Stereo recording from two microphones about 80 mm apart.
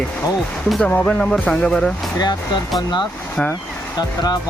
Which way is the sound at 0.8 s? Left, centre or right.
Left.